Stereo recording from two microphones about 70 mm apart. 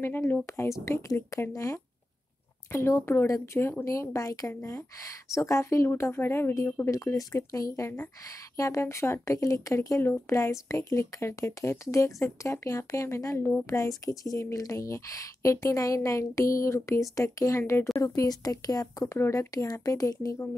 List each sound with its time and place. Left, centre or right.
0.0 s speech: left
0.5 s a woman's voice: left
6.9 s a woman's voice: left
18.1 s speech: left
19.1 s speech: left
19.5 s speech: left